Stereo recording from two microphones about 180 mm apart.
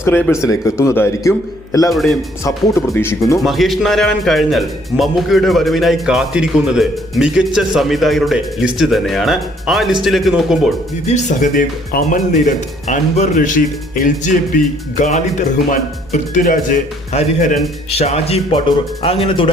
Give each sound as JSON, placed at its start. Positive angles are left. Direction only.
{"t": 0.0, "sound": "a man's voice", "side_deg": 15}
{"t": 1.9, "sound": "speech", "side_deg": 0}
{"t": 2.4, "sound": "a man's voice", "side_deg": 15}
{"t": 3.3, "sound": "speech", "side_deg": 0}
{"t": 11.1, "sound": "speech", "side_deg": 40}